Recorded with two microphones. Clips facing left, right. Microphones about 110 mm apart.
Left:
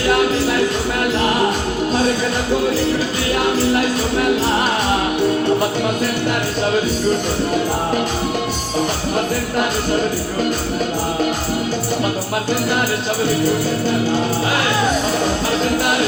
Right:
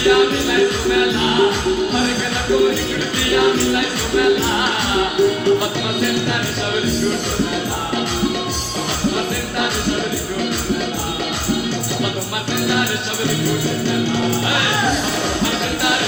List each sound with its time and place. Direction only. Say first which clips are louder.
0.1 s music: right 1 dB; 40° left (ahead or behind)